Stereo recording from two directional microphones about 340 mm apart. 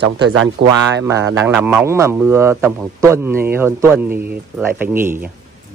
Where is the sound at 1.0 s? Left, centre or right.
Centre.